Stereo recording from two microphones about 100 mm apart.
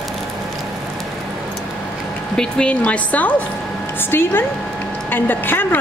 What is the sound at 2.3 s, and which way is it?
Speech, 10° left (ahead or behind).